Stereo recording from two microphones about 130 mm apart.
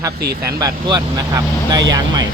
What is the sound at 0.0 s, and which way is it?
Speech, 25° right (ahead or behind).